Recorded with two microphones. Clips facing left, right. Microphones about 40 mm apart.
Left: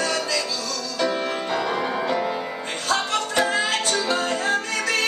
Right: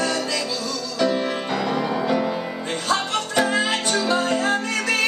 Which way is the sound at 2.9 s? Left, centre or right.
Centre.